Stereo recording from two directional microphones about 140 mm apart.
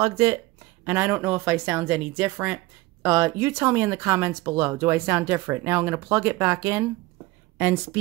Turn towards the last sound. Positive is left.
turn(degrees=-15)  # may be behind; listen again after turning